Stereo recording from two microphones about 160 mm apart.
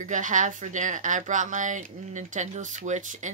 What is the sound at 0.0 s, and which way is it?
A woman's voice, 50° right (ahead or behind).